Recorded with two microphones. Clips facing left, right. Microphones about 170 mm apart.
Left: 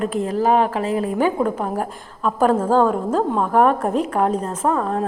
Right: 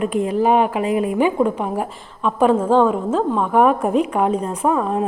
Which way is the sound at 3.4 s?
5° right (ahead or behind).